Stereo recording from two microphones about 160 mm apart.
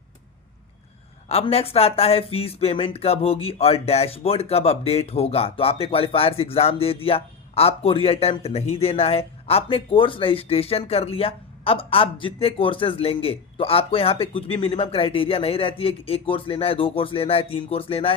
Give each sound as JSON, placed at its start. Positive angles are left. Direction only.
{"t": 1.3, "sound": "speech", "side_deg": 40}